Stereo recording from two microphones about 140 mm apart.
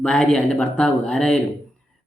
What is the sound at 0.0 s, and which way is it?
Speech, 5° left (ahead or behind).